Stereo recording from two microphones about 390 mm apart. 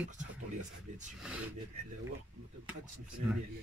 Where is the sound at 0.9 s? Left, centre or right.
Centre.